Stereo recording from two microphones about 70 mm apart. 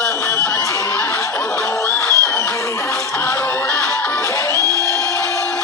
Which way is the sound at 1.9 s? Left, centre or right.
Left.